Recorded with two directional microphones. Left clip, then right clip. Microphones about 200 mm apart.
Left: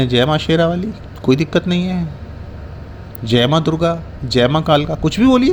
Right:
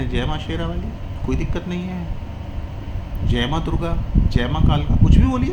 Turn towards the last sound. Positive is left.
turn(degrees=45)  # may be behind; listen again after turning